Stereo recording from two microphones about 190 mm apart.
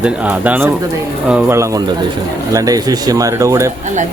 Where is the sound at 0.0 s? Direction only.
10° right (ahead or behind).